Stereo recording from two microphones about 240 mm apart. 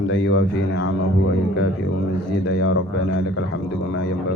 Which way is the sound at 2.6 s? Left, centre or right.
Left.